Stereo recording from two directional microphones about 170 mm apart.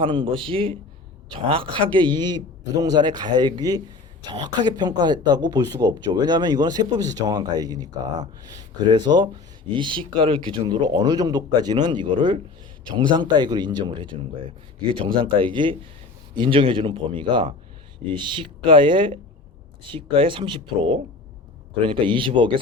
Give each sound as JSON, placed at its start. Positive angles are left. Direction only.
{"t": 0.0, "sound": "speech", "side_deg": -30}